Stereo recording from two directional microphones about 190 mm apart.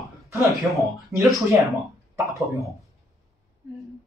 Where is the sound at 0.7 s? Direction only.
Centre (ahead or behind).